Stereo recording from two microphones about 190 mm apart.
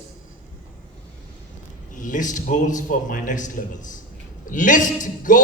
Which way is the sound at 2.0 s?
45° left (ahead or behind).